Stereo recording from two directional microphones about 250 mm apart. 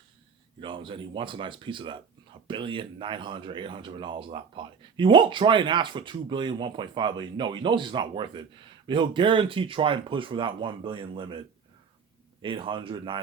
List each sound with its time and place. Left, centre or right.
0.6 s speech: centre